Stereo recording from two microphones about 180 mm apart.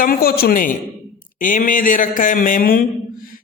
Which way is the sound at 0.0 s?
55° left (ahead or behind).